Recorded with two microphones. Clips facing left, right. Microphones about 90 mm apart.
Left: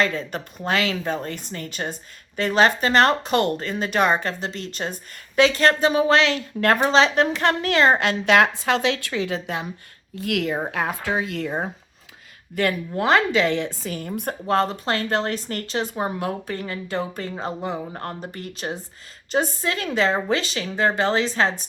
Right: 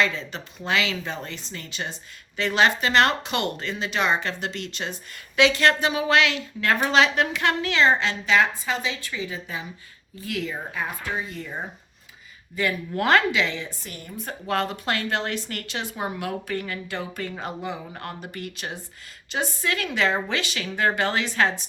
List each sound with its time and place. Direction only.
0.0 s a woman's voice: 45° left (ahead or behind); by 10.6 s 65° left (ahead or behind)
10.7 s a woman's voice: 75° left (ahead or behind)
12.9 s a woman's voice: 25° left (ahead or behind)
13.3 s a woman's voice: 40° left (ahead or behind)